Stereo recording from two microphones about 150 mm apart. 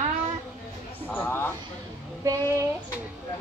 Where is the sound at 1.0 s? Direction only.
10° left (ahead or behind).